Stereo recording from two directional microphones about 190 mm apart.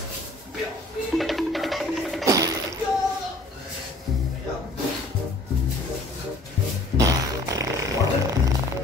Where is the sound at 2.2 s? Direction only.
20° right (ahead or behind).